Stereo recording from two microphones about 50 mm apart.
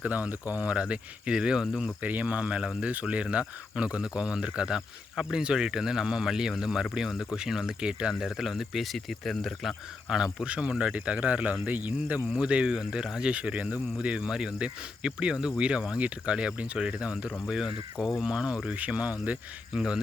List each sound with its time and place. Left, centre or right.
0.0 s speech: right; by 1.6 s centre
2.0 s speech: right; by 7.6 s centre
7.7 s speech: centre
8.2 s speech: centre
10.1 s speech: centre
12.3 s speech: right
19.7 s speech: centre